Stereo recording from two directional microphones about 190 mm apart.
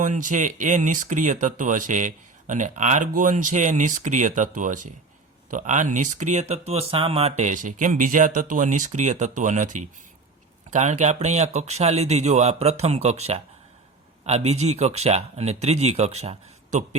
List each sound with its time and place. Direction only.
0.0 s speech: 45° right (ahead or behind)